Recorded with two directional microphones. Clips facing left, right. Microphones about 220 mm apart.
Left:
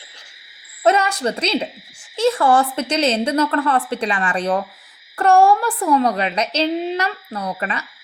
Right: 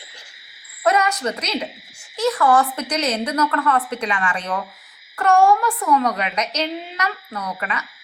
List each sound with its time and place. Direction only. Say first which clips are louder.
0.8 s a woman's voice: left 2 dB; 25° left (ahead or behind)